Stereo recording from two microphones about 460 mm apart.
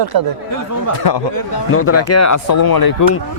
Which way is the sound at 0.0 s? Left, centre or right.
Right.